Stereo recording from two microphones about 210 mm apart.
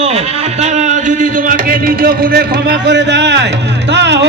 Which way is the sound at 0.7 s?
35° right (ahead or behind).